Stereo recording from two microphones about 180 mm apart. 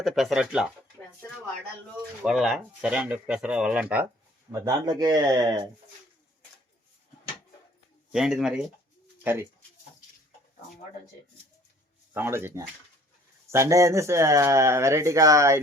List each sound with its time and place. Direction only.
0.0 s speech: centre (ahead or behind)
2.2 s speech: centre (ahead or behind)
4.5 s speech: 20° right (ahead or behind)
8.1 s speech: 5° right (ahead or behind)
12.1 s speech: 15° right (ahead or behind)